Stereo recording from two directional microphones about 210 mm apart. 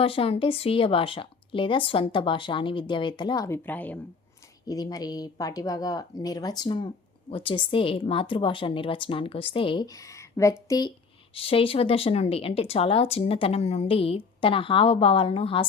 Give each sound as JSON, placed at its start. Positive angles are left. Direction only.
{"t": 0.0, "sound": "speech", "side_deg": 25}
{"t": 4.6, "sound": "speech", "side_deg": 20}